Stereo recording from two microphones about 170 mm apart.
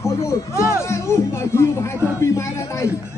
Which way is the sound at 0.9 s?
15° left (ahead or behind).